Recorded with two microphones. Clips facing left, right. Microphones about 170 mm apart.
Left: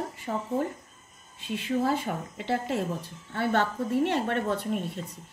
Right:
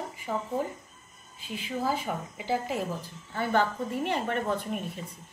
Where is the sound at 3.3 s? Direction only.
70° left (ahead or behind).